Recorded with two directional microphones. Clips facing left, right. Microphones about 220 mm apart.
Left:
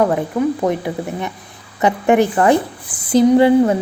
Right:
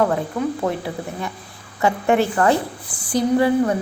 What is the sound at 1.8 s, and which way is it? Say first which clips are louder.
A woman's voice: left 4 dB; 15° left (ahead or behind).